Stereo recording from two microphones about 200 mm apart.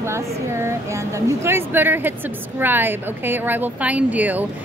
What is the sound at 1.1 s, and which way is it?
A woman's voice, 15° right (ahead or behind).